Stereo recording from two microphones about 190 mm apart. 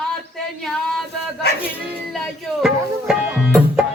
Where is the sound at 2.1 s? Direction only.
Centre (ahead or behind).